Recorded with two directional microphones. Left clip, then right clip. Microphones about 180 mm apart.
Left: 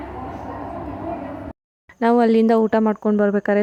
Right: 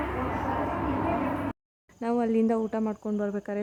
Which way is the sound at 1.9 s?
50° left (ahead or behind).